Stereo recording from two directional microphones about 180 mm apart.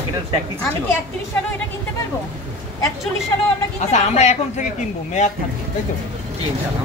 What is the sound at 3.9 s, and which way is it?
Speech, 40° left (ahead or behind).